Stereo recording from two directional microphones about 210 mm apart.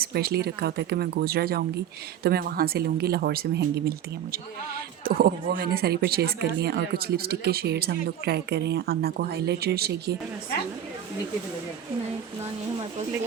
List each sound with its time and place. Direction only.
0.0 s speech: 50° right (ahead or behind)